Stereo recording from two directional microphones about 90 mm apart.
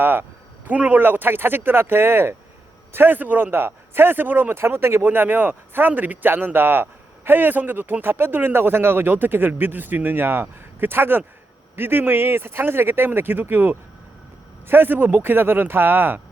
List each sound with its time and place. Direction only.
0.0 s speech: 25° right (ahead or behind)